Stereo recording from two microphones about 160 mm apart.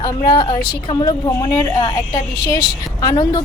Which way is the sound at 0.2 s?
30° left (ahead or behind).